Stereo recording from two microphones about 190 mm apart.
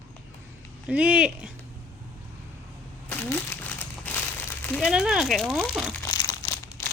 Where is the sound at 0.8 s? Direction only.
5° right (ahead or behind).